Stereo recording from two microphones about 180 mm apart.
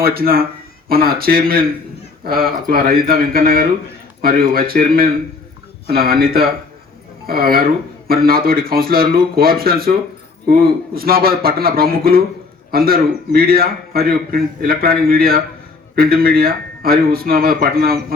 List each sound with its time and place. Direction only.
0.0 s speech: 55° right (ahead or behind)